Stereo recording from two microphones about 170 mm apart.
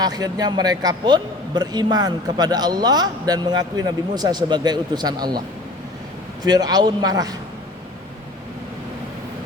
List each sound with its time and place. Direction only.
0.0 s a man's voice: 25° right (ahead or behind)
6.4 s a man's voice: 25° right (ahead or behind)